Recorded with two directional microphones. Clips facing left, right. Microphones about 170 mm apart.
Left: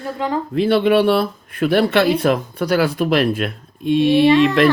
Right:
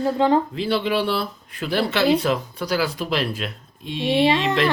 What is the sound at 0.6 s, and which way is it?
Speech, 55° left (ahead or behind).